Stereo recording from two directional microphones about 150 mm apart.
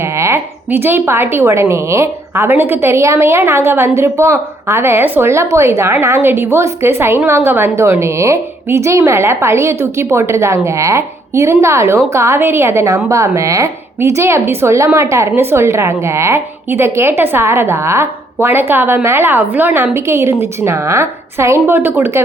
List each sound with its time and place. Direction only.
0.2 s speech: 15° right (ahead or behind)